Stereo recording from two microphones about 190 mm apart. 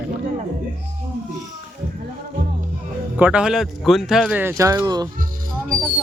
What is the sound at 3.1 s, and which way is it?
Speech, 5° right (ahead or behind).